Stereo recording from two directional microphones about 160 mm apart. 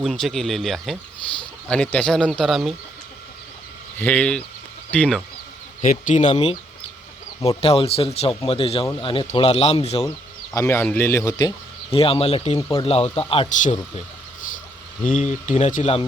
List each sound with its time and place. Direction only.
0.0 s speech: centre (ahead or behind)
3.9 s speech: 10° left (ahead or behind)
5.8 s speech: 55° left (ahead or behind); by 10.1 s 30° left (ahead or behind)
10.5 s speech: 20° left (ahead or behind)
11.9 s speech: 35° left (ahead or behind)
12.5 s speech: 20° left (ahead or behind)
12.8 s speech: 35° left (ahead or behind)
15.1 s speech: 50° left (ahead or behind)